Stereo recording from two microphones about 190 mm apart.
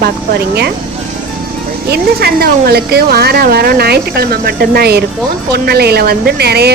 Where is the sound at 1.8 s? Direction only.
55° right (ahead or behind).